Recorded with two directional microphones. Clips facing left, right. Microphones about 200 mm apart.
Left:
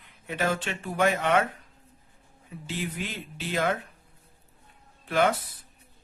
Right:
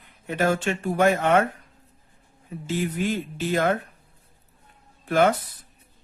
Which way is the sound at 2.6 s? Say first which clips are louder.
Right 8 dB; 45° right (ahead or behind).